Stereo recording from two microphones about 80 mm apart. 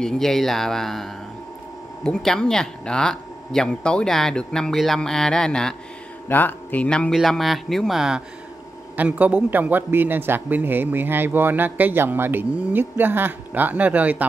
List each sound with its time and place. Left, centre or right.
0.0 s speech: centre
6.2 s a man's voice: left
7.1 s speech: centre
8.9 s a man's voice: right